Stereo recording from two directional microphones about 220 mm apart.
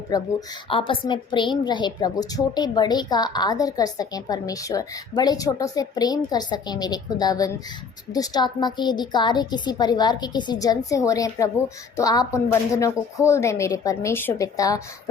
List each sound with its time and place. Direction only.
0.1 s a woman's voice: 20° left (ahead or behind)